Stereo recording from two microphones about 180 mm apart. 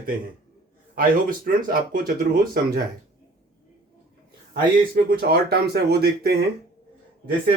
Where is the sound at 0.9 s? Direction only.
50° right (ahead or behind).